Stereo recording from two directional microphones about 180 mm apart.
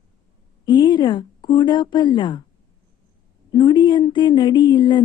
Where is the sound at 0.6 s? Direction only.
25° left (ahead or behind).